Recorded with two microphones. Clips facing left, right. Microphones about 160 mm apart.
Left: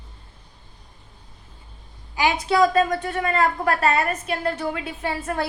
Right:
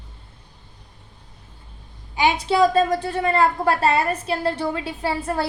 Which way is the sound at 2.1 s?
25° right (ahead or behind).